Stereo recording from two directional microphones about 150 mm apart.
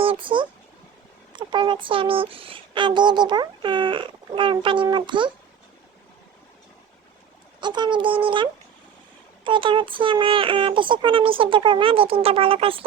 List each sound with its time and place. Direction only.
0.0 s a sound: 35° right (ahead or behind)
1.3 s speech: 30° right (ahead or behind)
7.6 s speech: 30° right (ahead or behind)